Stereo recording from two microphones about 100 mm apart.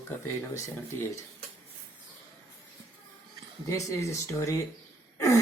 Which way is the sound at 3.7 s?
35° left (ahead or behind).